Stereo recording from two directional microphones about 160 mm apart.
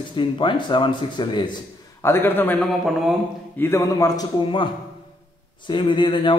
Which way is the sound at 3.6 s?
20° left (ahead or behind).